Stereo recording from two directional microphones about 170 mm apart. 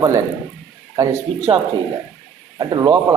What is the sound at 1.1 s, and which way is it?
Speech, 35° right (ahead or behind).